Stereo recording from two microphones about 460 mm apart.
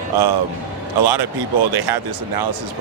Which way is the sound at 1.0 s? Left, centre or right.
Right.